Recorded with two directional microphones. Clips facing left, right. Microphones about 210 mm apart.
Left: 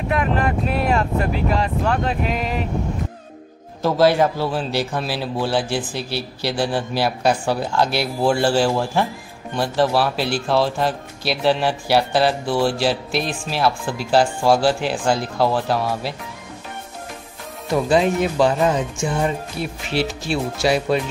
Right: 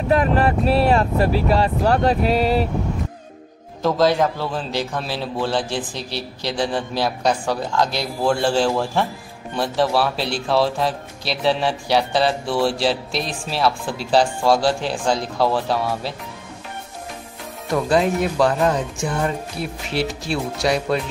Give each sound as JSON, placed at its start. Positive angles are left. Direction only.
{"t": 0.1, "sound": "speech", "side_deg": -35}
{"t": 3.8, "sound": "a man's voice", "side_deg": 5}
{"t": 17.8, "sound": "a man's voice", "side_deg": 0}